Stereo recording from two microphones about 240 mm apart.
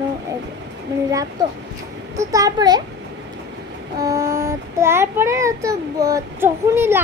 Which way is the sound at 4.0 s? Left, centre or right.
Centre.